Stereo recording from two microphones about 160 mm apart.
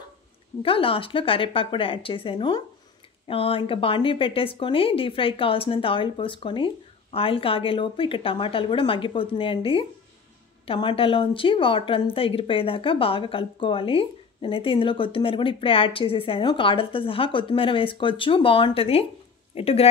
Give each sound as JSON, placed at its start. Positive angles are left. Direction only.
{"t": 0.6, "sound": "a woman's voice", "side_deg": 35}